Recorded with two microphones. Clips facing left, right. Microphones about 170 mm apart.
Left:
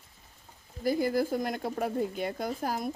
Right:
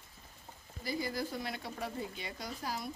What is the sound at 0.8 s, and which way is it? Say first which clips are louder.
Speech: left 10 dB; 50° left (ahead or behind).